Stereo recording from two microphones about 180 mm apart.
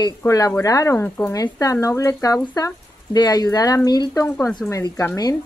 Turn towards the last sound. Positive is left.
turn(degrees=15)  # may be behind; listen again after turning